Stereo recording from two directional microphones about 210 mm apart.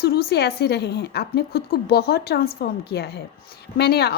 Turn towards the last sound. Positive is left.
turn(degrees=50)  # may be behind; listen again after turning